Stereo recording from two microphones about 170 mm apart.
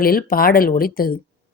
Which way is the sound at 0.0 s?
60° left (ahead or behind).